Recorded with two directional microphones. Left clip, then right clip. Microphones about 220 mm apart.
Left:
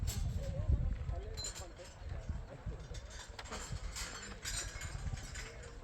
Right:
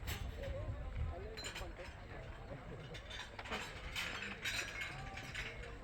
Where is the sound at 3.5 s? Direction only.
40° right (ahead or behind).